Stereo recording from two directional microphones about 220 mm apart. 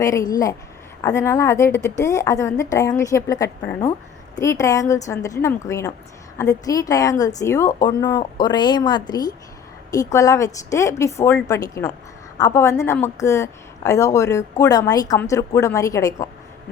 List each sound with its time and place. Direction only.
0.0 s a woman's voice: 15° left (ahead or behind)